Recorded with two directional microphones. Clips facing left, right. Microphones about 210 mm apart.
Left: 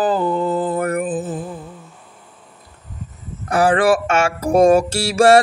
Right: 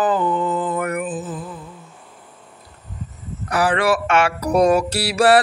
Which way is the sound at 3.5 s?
50° left (ahead or behind).